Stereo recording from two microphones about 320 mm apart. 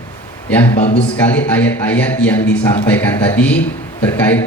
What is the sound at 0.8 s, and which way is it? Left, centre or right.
Speech, centre.